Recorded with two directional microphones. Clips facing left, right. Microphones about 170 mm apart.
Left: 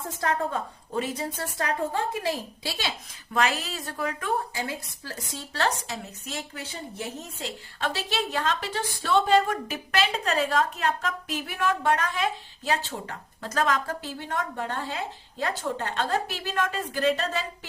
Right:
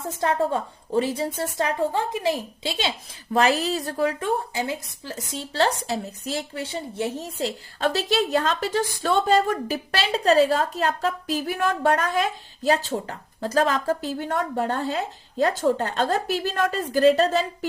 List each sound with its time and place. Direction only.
0.2 s a woman's voice: 30° right (ahead or behind)
3.3 s a woman's voice: 35° right (ahead or behind)